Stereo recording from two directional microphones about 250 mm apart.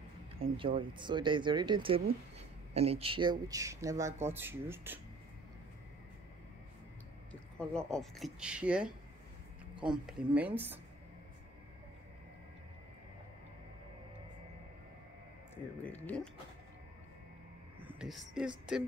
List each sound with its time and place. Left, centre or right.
0.4 s speech: right
7.5 s speech: centre
15.5 s a sound: centre
17.7 s speech: centre